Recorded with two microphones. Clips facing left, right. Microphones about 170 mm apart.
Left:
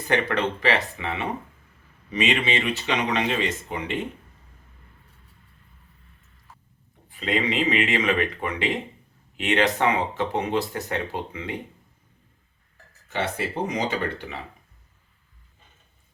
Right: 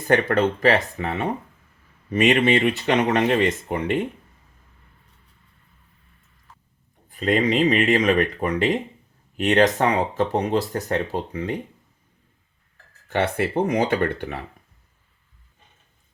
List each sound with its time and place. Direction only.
0.1 s speech: 45° right (ahead or behind)
7.1 s speech: 45° right (ahead or behind)
13.1 s speech: 60° right (ahead or behind)